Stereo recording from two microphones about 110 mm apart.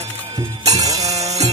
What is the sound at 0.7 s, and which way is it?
Music, 30° right (ahead or behind).